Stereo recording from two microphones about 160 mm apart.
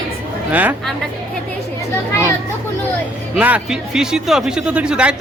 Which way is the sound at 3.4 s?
10° right (ahead or behind).